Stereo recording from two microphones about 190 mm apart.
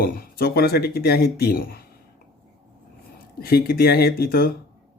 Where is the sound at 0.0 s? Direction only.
50° left (ahead or behind).